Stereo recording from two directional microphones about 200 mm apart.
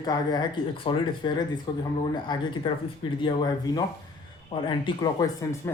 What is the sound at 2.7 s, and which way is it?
Speech, 25° left (ahead or behind).